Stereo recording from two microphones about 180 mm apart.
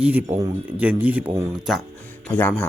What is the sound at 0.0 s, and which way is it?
Speech, 10° right (ahead or behind).